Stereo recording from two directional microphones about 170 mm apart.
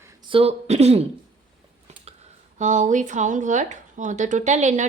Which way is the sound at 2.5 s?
45° right (ahead or behind).